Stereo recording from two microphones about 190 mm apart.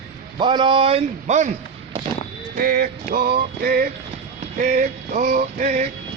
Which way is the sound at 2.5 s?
50° right (ahead or behind).